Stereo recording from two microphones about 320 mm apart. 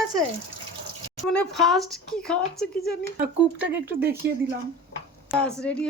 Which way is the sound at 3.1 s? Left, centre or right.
Right.